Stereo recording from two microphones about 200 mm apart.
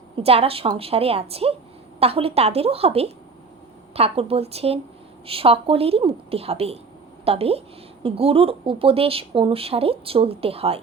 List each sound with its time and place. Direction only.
0.2 s speech: 30° right (ahead or behind)